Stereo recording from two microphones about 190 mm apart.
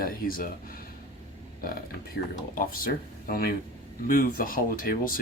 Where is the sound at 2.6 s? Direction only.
50° left (ahead or behind).